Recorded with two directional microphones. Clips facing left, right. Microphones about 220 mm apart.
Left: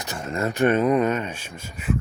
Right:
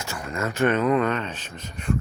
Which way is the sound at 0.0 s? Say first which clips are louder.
Left 2 dB; 20° left (ahead or behind).